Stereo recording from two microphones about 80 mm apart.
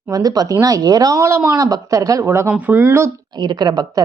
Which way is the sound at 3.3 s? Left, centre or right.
Right.